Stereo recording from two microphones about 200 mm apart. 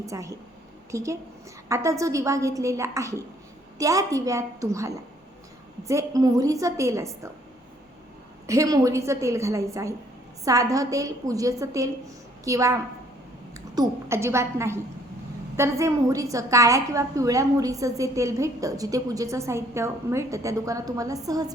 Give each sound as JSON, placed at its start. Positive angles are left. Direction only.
{"t": 0.0, "sound": "a woman's voice", "side_deg": -15}
{"t": 8.4, "sound": "a woman's voice", "side_deg": -15}